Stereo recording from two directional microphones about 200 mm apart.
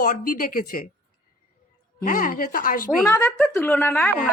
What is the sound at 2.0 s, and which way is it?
Speech, 45° left (ahead or behind).